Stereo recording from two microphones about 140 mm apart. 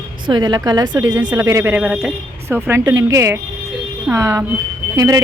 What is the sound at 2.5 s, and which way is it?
A woman's voice, 15° right (ahead or behind).